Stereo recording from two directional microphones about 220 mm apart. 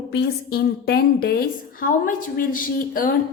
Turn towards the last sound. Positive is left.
turn(degrees=40)  # may be behind; listen again after turning